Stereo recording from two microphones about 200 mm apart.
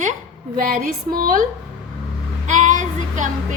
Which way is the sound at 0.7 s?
45° right (ahead or behind).